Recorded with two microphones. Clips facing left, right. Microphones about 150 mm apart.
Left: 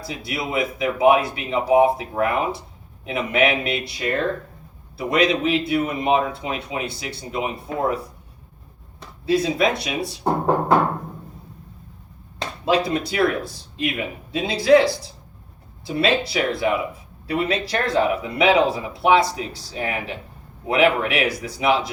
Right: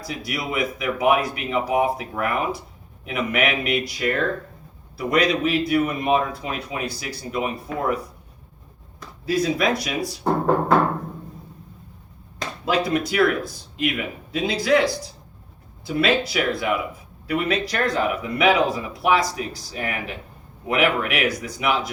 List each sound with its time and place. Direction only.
0.0 s a man's voice: 30° left (ahead or behind)
12.4 s a man's voice: 30° left (ahead or behind)